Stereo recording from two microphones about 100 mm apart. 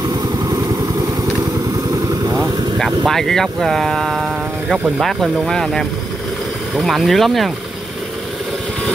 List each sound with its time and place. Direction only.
0.5 s vehicle: 40° right (ahead or behind)
2.8 s speech: 5° left (ahead or behind)
4.7 s speech: 15° right (ahead or behind)
5.0 s speech: 5° left (ahead or behind)